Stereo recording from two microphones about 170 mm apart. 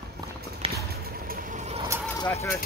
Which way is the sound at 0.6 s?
35° right (ahead or behind).